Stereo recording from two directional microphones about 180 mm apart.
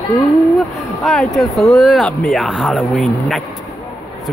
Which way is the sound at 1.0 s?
Centre (ahead or behind).